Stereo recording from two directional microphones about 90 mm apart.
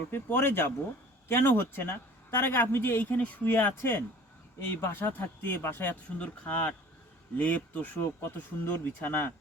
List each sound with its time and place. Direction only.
0.1 s speech: 25° left (ahead or behind)
6.1 s speech: 15° left (ahead or behind)